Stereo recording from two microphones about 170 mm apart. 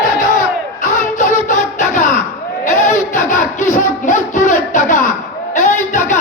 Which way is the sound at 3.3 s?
45° left (ahead or behind).